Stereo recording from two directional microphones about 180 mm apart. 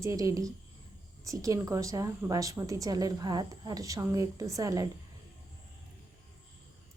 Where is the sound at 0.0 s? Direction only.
20° right (ahead or behind).